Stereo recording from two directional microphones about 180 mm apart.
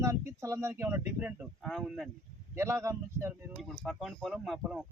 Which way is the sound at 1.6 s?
Centre (ahead or behind).